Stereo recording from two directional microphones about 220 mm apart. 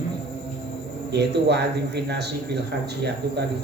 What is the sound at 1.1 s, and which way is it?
A man's voice, 50° right (ahead or behind).